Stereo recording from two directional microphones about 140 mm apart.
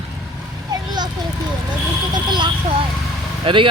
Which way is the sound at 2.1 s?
35° right (ahead or behind).